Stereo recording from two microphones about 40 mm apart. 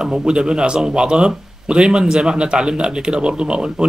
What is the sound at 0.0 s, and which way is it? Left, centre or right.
A man's voice, right.